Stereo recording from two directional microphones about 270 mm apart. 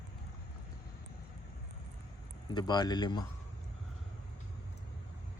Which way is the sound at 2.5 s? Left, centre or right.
Centre.